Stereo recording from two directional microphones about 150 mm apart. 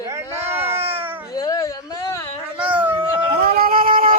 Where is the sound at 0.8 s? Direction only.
40° right (ahead or behind).